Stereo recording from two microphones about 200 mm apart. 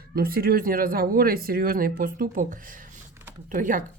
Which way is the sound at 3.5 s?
40° right (ahead or behind).